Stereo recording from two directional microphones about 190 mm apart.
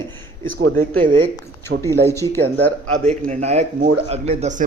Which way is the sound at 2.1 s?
15° left (ahead or behind).